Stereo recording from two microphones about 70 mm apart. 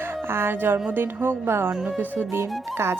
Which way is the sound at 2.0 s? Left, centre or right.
Right.